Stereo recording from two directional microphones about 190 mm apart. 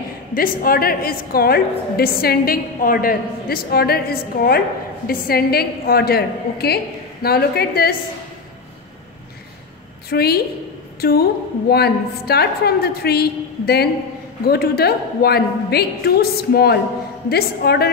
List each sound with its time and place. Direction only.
0.3 s a woman's voice: 50° left (ahead or behind)
10.0 s a woman's voice: 55° left (ahead or behind)